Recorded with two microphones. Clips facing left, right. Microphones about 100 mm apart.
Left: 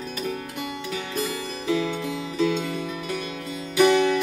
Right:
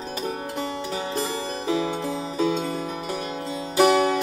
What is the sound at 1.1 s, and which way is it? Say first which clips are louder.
Music: right 2 dB; 35° right (ahead or behind).